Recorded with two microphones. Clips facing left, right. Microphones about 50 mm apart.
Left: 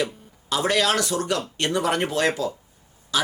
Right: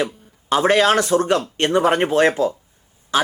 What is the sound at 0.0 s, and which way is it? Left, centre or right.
A man's voice, right.